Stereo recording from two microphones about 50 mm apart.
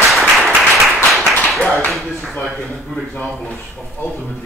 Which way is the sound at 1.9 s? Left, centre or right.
Centre.